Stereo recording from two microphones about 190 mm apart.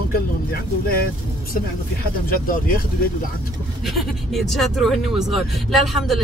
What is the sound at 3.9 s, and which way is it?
Speech, centre (ahead or behind).